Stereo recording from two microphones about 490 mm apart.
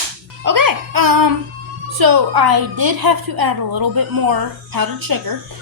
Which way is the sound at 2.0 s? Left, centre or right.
Right.